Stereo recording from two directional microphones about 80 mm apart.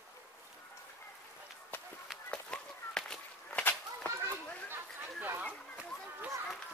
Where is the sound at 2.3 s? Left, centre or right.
Centre.